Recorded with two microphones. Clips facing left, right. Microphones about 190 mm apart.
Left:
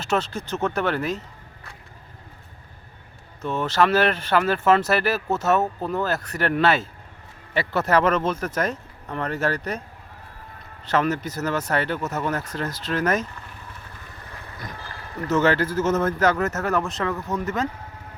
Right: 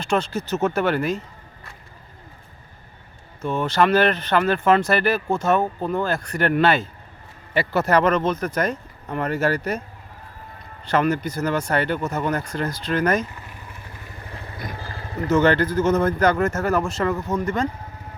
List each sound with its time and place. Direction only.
0.0 s speech: centre (ahead or behind)
3.4 s speech: centre (ahead or behind)
10.8 s speech: centre (ahead or behind)
13.3 s vehicle: 10° right (ahead or behind)
14.3 s boat: 15° right (ahead or behind)
14.8 s a sound: 30° right (ahead or behind)
15.3 s speech: 5° left (ahead or behind)